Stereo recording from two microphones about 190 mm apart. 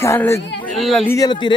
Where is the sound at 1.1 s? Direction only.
20° left (ahead or behind).